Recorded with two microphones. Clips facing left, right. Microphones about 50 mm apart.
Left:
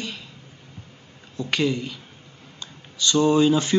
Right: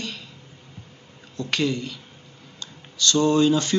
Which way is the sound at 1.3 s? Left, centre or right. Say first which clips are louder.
Left 1 dB; centre.